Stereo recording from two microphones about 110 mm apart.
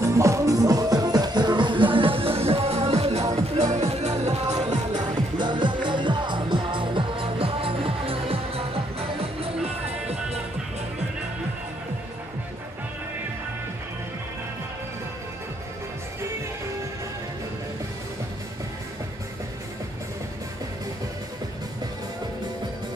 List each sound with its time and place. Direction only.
0.0 s music: 25° right (ahead or behind); by 4.1 s 80° right
4.5 s music: 40° right (ahead or behind); by 10.4 s 70° right (ahead or behind)